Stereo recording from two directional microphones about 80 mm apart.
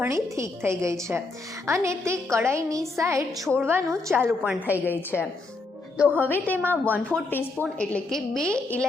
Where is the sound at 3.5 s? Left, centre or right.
Right.